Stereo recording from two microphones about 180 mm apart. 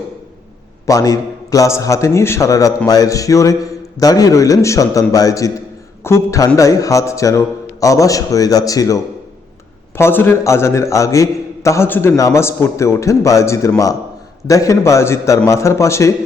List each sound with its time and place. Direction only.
0.9 s a man's voice: 20° left (ahead or behind)
10.0 s a man's voice: 10° left (ahead or behind)